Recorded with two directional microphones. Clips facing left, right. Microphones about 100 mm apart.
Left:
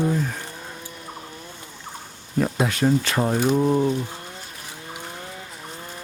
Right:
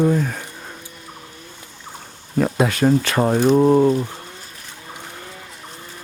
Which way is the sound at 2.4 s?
75° right (ahead or behind).